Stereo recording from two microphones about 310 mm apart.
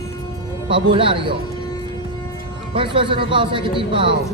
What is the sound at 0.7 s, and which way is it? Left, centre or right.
Speech, centre.